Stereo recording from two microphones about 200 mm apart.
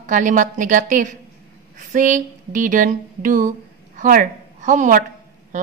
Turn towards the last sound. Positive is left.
turn(degrees=-40)  # may be behind; listen again after turning